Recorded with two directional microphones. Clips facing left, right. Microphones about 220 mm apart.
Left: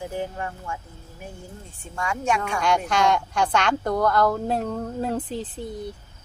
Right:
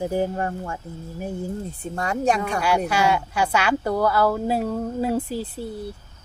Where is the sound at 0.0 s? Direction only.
40° right (ahead or behind).